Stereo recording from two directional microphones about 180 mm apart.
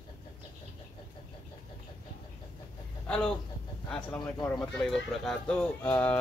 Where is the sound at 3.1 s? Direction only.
5° left (ahead or behind).